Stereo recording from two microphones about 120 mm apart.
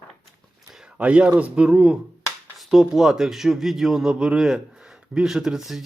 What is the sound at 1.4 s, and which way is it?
Speech, 10° right (ahead or behind).